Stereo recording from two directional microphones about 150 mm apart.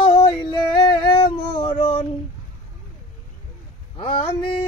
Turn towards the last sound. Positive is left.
turn(degrees=35)  # may be behind; listen again after turning